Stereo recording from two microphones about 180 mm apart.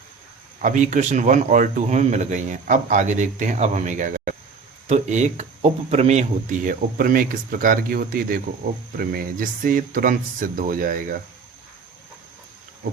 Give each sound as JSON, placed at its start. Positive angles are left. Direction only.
{"t": 0.6, "sound": "speech", "side_deg": -45}